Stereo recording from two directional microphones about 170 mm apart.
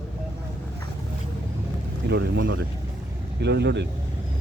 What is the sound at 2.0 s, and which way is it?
Speech, 90° right.